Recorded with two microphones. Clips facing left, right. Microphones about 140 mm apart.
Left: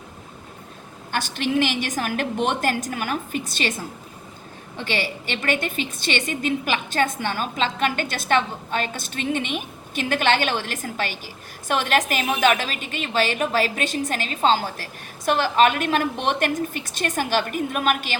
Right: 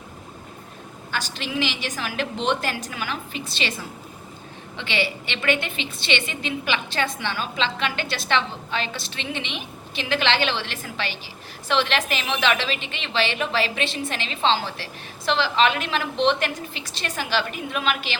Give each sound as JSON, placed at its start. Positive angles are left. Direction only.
{"t": 1.1, "sound": "a woman's voice", "side_deg": 50}